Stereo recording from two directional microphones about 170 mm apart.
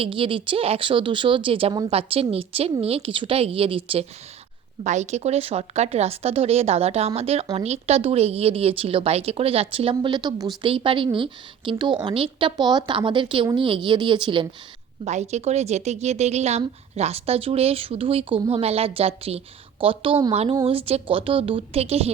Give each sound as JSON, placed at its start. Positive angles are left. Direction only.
{"t": 0.0, "sound": "a woman's voice", "side_deg": -30}
{"t": 4.8, "sound": "a woman's voice", "side_deg": -45}
{"t": 15.0, "sound": "a woman's voice", "side_deg": -40}